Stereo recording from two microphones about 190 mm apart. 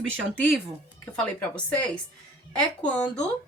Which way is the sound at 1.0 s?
5° left (ahead or behind).